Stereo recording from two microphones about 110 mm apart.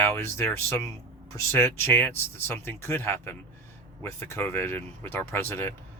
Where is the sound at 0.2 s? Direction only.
25° left (ahead or behind).